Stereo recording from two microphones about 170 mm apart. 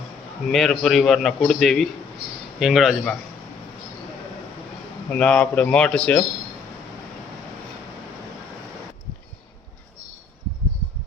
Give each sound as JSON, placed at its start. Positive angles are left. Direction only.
{"t": 0.5, "sound": "a man's voice", "side_deg": 0}
{"t": 5.0, "sound": "a man's voice", "side_deg": 5}